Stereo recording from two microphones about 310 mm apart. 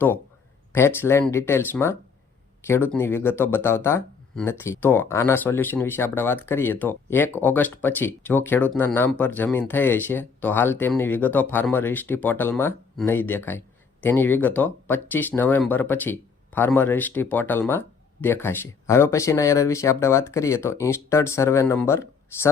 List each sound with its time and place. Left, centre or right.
0.7 s speech: centre